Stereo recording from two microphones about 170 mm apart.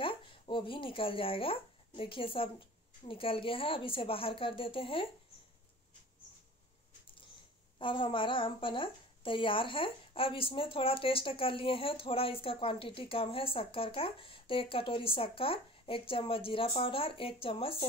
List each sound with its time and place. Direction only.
0.0 s speech: 30° left (ahead or behind)
7.8 s speech: 30° left (ahead or behind)